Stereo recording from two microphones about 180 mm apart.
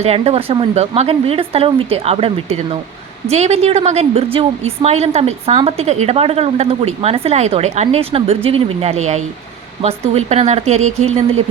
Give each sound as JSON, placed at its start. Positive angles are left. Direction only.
{"t": 0.0, "sound": "a woman's voice", "side_deg": -35}